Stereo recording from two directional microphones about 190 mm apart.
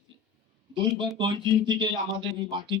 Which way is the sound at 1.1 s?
25° right (ahead or behind).